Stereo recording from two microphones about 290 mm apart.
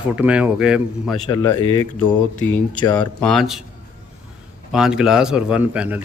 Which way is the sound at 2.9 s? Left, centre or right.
Centre.